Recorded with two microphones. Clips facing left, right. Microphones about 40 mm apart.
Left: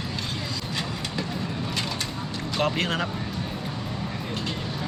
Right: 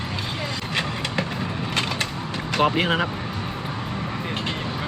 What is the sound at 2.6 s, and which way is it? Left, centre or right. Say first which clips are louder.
Speech: right 5 dB; right.